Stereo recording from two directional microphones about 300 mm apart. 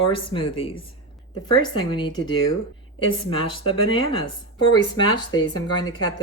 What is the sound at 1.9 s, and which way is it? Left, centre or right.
Speech, centre.